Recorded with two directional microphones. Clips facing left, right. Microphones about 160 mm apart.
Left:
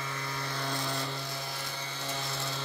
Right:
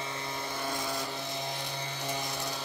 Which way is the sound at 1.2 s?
20° right (ahead or behind).